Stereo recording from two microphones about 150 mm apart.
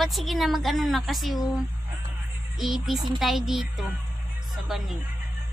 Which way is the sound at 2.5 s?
Centre (ahead or behind).